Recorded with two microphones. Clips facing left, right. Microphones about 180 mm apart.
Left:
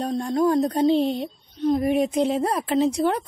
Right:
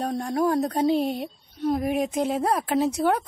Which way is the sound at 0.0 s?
5° right (ahead or behind).